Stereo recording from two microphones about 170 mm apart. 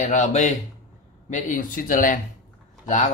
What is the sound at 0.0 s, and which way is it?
Speech, 45° left (ahead or behind).